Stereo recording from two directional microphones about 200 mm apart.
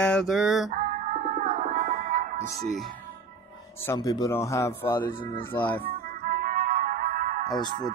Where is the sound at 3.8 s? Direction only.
15° left (ahead or behind).